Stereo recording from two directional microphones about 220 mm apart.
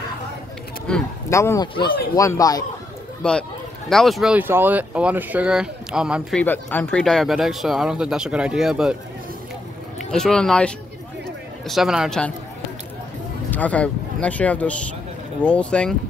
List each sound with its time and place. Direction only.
0.8 s a man's voice: 10° left (ahead or behind)
3.2 s speech: 5° left (ahead or behind)
6.4 s speech: 10° left (ahead or behind)
9.9 s speech: centre (ahead or behind)
13.5 s speech: 5° left (ahead or behind)